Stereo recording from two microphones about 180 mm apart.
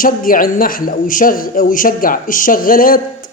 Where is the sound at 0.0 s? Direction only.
50° left (ahead or behind).